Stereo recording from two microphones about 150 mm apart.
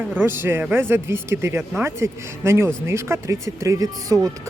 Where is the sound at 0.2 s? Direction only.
15° right (ahead or behind).